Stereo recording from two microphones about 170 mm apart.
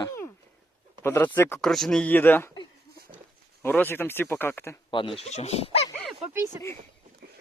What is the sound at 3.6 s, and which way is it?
Speech, 10° left (ahead or behind).